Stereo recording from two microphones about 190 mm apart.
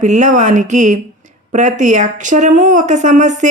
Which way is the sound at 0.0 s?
40° right (ahead or behind).